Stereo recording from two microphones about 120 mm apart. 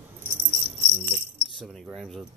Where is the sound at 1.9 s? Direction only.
Centre (ahead or behind).